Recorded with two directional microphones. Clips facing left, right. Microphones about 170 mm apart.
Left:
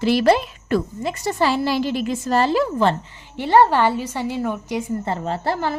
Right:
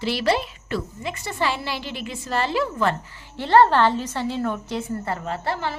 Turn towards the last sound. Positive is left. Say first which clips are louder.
# left 4 dB
turn(degrees=40)  # may be behind; listen again after turning